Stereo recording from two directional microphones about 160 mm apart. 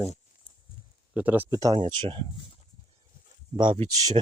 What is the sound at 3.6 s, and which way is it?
Speech, 30° right (ahead or behind).